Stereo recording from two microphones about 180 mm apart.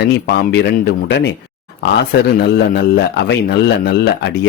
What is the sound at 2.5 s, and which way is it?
A man's voice, 65° left (ahead or behind).